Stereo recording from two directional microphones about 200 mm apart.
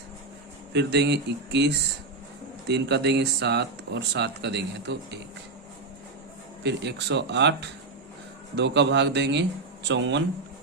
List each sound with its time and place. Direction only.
0.7 s speech: 60° right (ahead or behind)
6.6 s speech: 60° right (ahead or behind)